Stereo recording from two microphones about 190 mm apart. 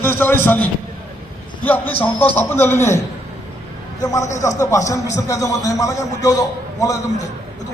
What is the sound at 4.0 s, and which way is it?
A man's voice, 20° left (ahead or behind).